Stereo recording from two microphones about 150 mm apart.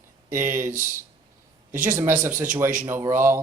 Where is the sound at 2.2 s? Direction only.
15° right (ahead or behind).